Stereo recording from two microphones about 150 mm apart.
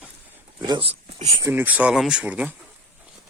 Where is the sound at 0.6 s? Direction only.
30° right (ahead or behind).